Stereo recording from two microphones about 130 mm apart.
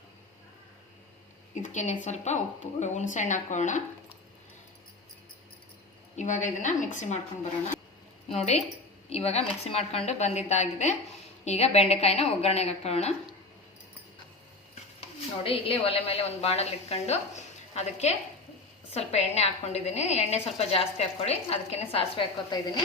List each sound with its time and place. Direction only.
1.6 s a woman's voice: 65° left (ahead or behind)
6.1 s a woman's voice: 70° left (ahead or behind)
8.3 s a woman's voice: 60° left (ahead or behind)
15.4 s a woman's voice: 45° left (ahead or behind)
22.5 s a woman's voice: 30° left (ahead or behind)